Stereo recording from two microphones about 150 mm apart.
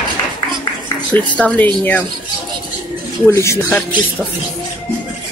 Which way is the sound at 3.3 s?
20° left (ahead or behind).